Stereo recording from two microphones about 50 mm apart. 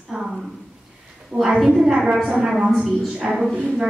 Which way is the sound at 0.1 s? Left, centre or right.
Centre.